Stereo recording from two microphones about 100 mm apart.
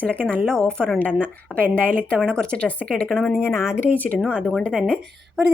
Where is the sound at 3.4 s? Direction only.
25° left (ahead or behind).